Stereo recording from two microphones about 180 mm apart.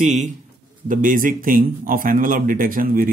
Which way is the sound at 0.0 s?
40° right (ahead or behind).